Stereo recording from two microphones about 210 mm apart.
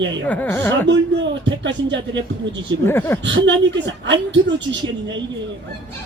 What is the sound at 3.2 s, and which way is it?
A man's voice, 60° right (ahead or behind).